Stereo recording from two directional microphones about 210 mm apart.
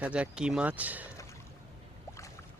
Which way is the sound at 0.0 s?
5° right (ahead or behind).